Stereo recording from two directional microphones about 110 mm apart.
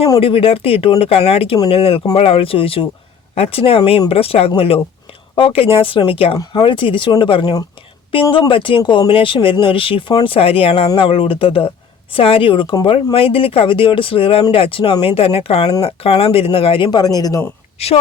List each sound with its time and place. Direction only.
0.2 s speech: 55° left (ahead or behind); by 17.4 s 35° left (ahead or behind)
17.7 s a woman's voice: 70° left (ahead or behind)